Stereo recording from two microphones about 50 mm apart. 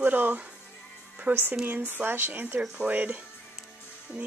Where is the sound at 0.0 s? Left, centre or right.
Right.